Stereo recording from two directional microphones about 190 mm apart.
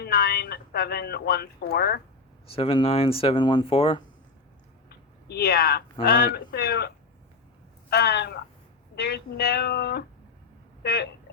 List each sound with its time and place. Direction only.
0.0 s speech: 55° left (ahead or behind)
2.5 s speech: 30° left (ahead or behind)
4.9 s speech: 55° left (ahead or behind)